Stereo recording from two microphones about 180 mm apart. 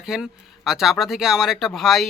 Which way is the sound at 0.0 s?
5° right (ahead or behind).